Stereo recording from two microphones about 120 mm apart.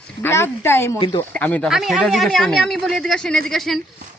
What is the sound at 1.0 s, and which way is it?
Speech, 50° left (ahead or behind).